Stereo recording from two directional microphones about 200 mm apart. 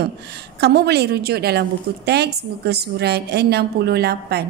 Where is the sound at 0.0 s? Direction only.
55° right (ahead or behind).